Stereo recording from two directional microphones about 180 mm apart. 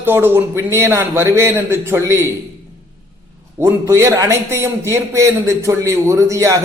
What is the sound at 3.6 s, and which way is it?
A man's voice, 15° right (ahead or behind).